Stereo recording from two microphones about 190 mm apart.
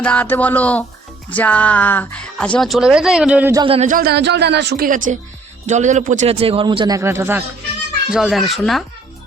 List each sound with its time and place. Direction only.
0.0 s speech: 5° left (ahead or behind)
3.5 s a man's voice: 25° right (ahead or behind)
3.8 s speech: 45° right (ahead or behind); by 4.9 s 60° right (ahead or behind)
4.9 s a man's voice: 45° right (ahead or behind); by 7.4 s 10° right (ahead or behind)
8.1 s speech: centre (ahead or behind)